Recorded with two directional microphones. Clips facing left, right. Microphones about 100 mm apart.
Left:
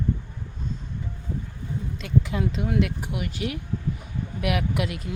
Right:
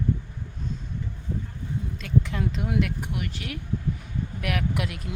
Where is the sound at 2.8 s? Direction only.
5° left (ahead or behind).